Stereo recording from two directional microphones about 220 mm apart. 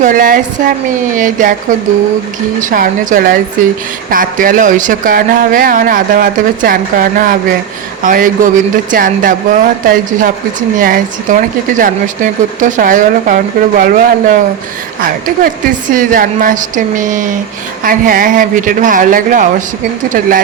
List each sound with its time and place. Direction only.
0.0 s a woman's voice: 40° right (ahead or behind)
2.6 s a woman's voice: 35° right (ahead or behind)